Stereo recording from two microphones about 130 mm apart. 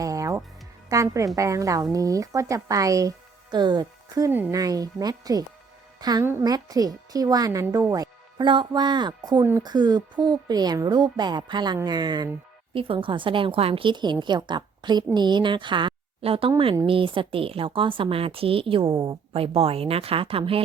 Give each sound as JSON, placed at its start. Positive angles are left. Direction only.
{"t": 0.0, "sound": "music", "side_deg": -25}
{"t": 0.9, "sound": "a woman's voice", "side_deg": -25}
{"t": 4.3, "sound": "speech", "side_deg": -15}
{"t": 4.5, "sound": "a child's voice", "side_deg": -25}
{"t": 9.4, "sound": "speech", "side_deg": -15}
{"t": 9.6, "sound": "a woman's voice", "side_deg": -30}